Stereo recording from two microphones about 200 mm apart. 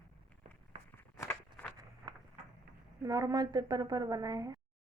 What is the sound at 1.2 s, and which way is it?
Walk, 10° left (ahead or behind).